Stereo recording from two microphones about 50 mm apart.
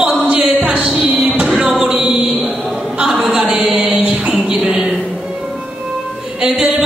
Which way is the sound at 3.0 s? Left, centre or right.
Right.